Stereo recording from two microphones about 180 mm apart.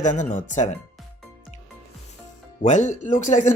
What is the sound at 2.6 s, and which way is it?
Speech, 40° left (ahead or behind).